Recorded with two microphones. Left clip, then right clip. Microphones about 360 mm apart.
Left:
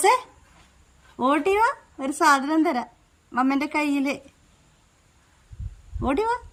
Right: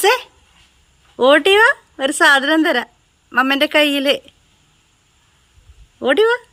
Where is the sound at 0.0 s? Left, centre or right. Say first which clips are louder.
Right 4 dB; centre.